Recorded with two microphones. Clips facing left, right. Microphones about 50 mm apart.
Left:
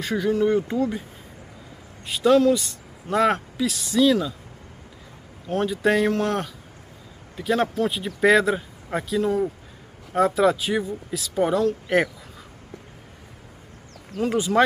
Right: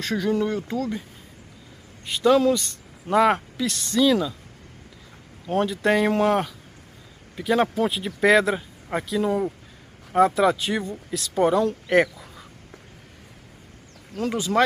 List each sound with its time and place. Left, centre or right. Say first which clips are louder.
0.0 s speech: left 2 dB; centre
0.5 s speech: left 5 dB; left
2.0 s speech: left 1 dB; centre
3.5 s speech: left 1 dB; centre
5.5 s speech: even; centre